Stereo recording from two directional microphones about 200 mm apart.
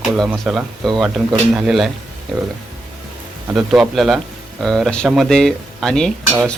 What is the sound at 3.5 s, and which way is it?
Speech, 5° right (ahead or behind).